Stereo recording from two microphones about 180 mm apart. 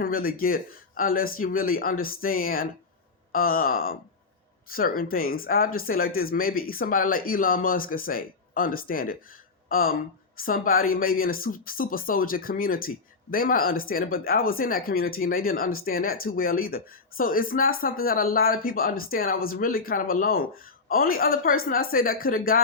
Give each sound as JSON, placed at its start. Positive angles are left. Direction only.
{"t": 0.0, "sound": "speech", "side_deg": 55}